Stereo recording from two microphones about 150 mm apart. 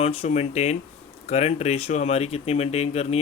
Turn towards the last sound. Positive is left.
turn(degrees=45)  # may be behind; listen again after turning